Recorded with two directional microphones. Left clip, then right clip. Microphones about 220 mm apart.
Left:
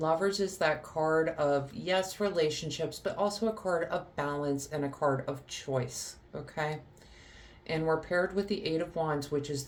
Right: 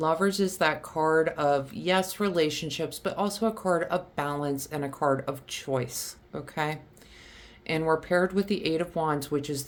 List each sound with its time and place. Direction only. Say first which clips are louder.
0.0 s speech: right 3 dB; 45° right (ahead or behind)